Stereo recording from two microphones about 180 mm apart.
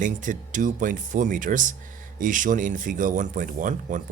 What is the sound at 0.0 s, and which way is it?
Speech, 45° right (ahead or behind).